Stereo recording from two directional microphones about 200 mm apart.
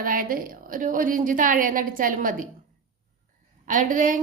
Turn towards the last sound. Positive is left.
turn(degrees=-40)  # may be behind; listen again after turning